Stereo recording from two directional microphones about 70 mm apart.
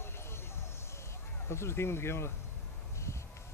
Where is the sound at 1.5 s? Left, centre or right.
Left.